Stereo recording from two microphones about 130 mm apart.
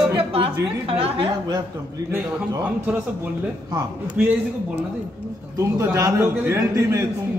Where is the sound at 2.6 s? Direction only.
15° right (ahead or behind).